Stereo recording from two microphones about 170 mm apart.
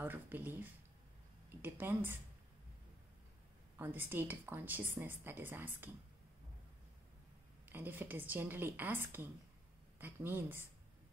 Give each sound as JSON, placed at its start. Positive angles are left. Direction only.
{"t": 0.0, "sound": "a woman's voice", "side_deg": -10}
{"t": 3.7, "sound": "speech", "side_deg": -10}
{"t": 7.7, "sound": "speech", "side_deg": -10}